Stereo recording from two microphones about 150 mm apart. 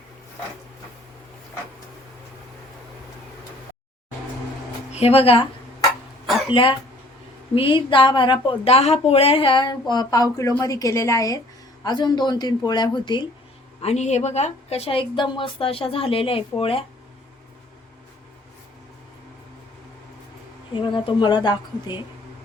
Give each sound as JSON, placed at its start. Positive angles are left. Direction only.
{"t": 4.9, "sound": "speech", "side_deg": 45}
{"t": 6.2, "sound": "a sound", "side_deg": 0}
{"t": 6.5, "sound": "a woman's voice", "side_deg": 35}
{"t": 13.8, "sound": "speech", "side_deg": 50}
{"t": 20.7, "sound": "speech", "side_deg": 35}